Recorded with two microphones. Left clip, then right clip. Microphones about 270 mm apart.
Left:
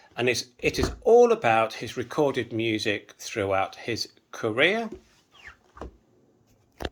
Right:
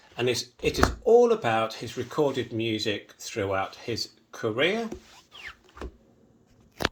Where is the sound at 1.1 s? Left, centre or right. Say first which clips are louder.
Left 3 dB; left.